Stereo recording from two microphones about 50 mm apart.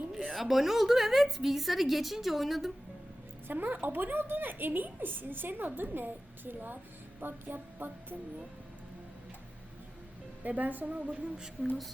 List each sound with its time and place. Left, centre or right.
0.3 s a woman's voice: centre
3.4 s a woman's voice: right
10.4 s a woman's voice: right
11.1 s speech: centre